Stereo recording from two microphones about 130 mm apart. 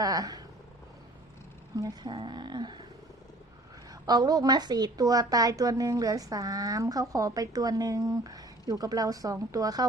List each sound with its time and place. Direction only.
0.0 s speech: 30° right (ahead or behind)
1.7 s speech: 30° right (ahead or behind)
4.0 s a woman's voice: 30° right (ahead or behind)